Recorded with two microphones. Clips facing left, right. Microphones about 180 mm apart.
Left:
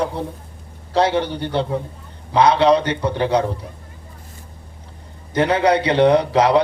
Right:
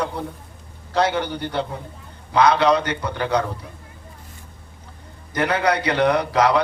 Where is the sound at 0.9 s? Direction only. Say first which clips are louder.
Left 3 dB; 30° left (ahead or behind).